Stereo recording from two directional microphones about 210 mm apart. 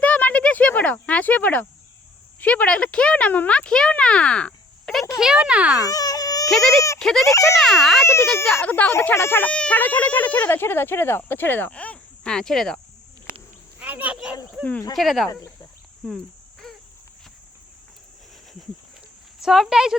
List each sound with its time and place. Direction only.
0.0 s a sound: 5° left (ahead or behind)
2.4 s speech: 5° left (ahead or behind)
5.8 s a sound: 15° left (ahead or behind)
6.5 s speech: centre (ahead or behind)
8.0 s speech: 10° left (ahead or behind)
13.7 s cricket: 5° right (ahead or behind)
14.6 s speech: 5° left (ahead or behind)
16.0 s cricket: centre (ahead or behind)
19.4 s speech: centre (ahead or behind)